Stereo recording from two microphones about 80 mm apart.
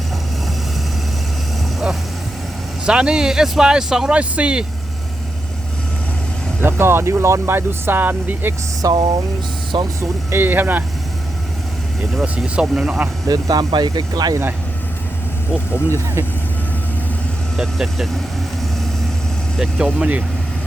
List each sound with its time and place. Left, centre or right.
2.8 s speech: centre
6.6 s speech: right
8.8 s speech: right
10.0 s speech: right
12.5 s speech: centre
13.2 s speech: right
17.6 s speech: centre
19.5 s speech: centre